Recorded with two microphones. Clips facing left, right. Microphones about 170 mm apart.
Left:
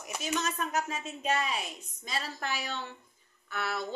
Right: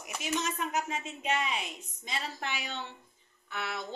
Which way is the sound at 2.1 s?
40° left (ahead or behind).